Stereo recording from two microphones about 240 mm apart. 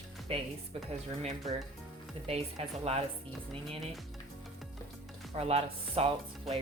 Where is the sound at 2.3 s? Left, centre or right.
Right.